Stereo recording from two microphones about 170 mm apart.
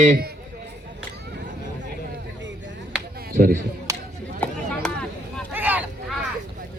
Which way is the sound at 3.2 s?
60° right (ahead or behind).